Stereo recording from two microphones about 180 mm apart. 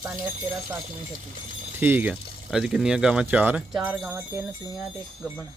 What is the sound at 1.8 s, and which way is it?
Speech, 10° right (ahead or behind).